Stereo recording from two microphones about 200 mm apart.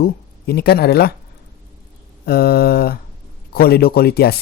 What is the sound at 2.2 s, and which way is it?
Speech, 50° left (ahead or behind).